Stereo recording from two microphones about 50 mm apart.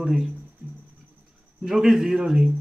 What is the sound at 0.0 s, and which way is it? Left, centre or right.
Speech, centre.